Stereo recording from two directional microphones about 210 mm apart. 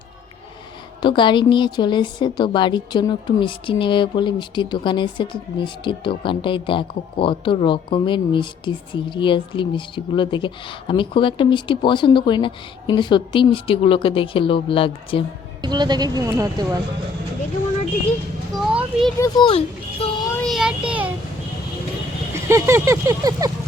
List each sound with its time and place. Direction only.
1.0 s a woman's voice: 20° left (ahead or behind)
15.6 s speech: 20° right (ahead or behind)
18.5 s a sound: centre (ahead or behind)
19.2 s speech: 25° left (ahead or behind)
20.3 s child singing: centre (ahead or behind)
22.3 s speech: 15° right (ahead or behind)